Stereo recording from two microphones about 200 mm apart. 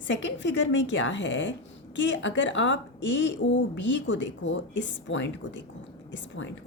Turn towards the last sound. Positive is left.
turn(degrees=65)  # may be behind; listen again after turning